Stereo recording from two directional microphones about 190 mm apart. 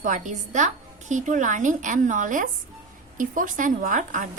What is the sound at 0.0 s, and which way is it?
A woman's voice, 40° right (ahead or behind).